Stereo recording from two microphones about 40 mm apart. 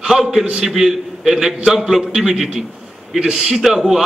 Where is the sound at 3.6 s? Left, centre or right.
Centre.